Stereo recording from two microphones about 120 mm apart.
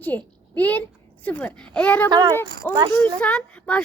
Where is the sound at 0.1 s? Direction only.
20° left (ahead or behind).